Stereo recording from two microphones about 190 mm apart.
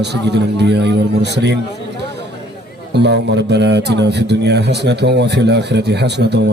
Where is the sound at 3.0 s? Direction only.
65° right (ahead or behind).